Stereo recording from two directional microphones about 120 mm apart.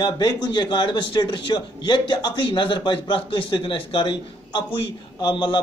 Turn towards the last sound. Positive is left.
turn(degrees=40)  # may be behind; listen again after turning